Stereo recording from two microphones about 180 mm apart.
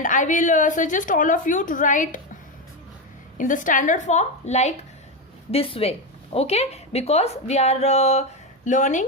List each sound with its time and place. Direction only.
0.0 s a woman's voice: 45° left (ahead or behind)